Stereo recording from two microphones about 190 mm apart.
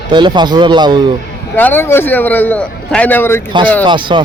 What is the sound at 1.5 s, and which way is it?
A man's voice, 10° left (ahead or behind).